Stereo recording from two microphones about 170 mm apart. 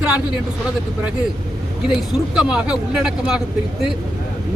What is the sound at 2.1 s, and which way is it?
A man's voice, 5° right (ahead or behind).